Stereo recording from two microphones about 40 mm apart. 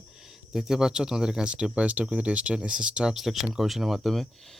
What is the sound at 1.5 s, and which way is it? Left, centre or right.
Speech, right.